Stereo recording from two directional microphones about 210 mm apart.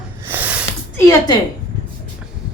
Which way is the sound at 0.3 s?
10° right (ahead or behind).